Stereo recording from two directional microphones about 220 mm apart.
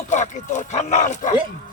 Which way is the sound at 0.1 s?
30° left (ahead or behind).